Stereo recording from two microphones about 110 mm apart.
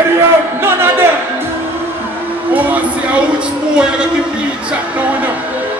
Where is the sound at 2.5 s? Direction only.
15° right (ahead or behind).